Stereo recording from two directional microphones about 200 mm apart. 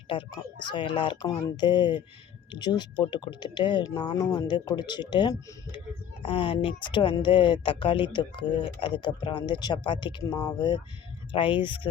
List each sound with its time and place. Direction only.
0.1 s speech: 25° left (ahead or behind)